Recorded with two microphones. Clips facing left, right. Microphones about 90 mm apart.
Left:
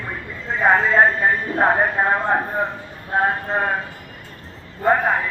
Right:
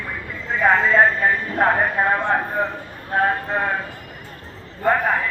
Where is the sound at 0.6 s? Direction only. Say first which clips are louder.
Even; 15° left (ahead or behind).